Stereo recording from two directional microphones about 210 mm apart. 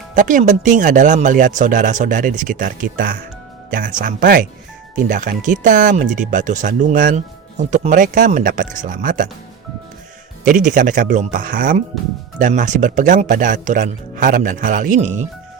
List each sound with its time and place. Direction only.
0.1 s speech: 40° right (ahead or behind)
10.4 s speech: 40° right (ahead or behind)